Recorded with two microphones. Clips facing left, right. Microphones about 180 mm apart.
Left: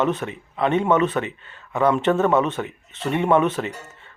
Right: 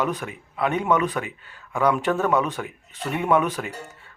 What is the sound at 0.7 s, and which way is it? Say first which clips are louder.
Speech: left 4 dB; 25° left (ahead or behind).